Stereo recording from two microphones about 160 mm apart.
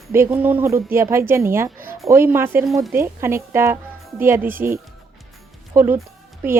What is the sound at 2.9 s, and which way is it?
A woman's voice, 15° right (ahead or behind).